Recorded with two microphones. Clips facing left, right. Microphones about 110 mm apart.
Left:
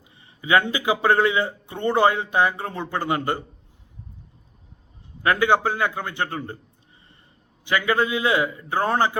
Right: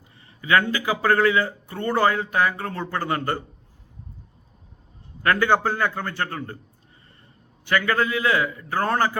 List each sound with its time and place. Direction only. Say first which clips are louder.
0.4 s a man's voice: left 1 dB; 20° left (ahead or behind)
5.2 s a man's voice: left 1 dB; 15° left (ahead or behind)
7.6 s speech: even; 15° left (ahead or behind)